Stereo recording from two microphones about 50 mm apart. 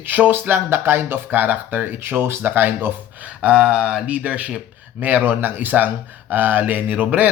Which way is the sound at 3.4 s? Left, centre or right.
Right.